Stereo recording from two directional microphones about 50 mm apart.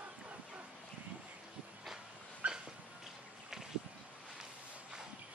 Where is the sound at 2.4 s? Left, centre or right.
Right.